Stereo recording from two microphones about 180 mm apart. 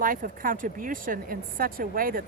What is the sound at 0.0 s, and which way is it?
Speech, 50° right (ahead or behind).